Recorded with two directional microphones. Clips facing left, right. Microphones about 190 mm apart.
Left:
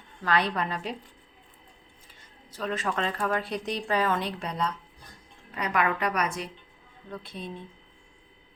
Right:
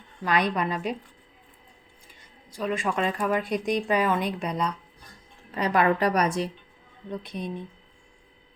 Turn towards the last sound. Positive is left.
turn(degrees=-15)  # may be behind; listen again after turning